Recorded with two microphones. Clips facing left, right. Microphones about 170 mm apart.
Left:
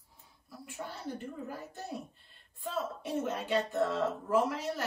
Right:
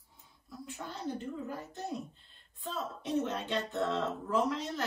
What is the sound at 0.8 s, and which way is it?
Speech, 20° right (ahead or behind).